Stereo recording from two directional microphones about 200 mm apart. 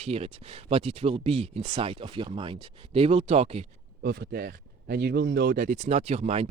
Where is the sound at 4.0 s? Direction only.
55° right (ahead or behind).